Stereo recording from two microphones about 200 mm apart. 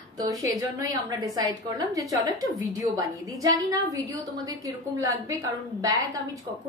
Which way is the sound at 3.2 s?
15° right (ahead or behind).